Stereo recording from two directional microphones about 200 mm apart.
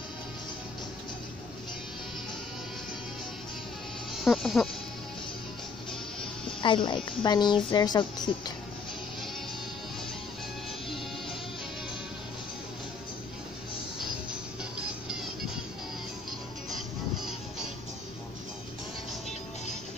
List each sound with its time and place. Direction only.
4.2 s speech: centre (ahead or behind)
6.6 s a woman's voice: 25° left (ahead or behind)
14.6 s music: 5° right (ahead or behind)
16.3 s music: centre (ahead or behind)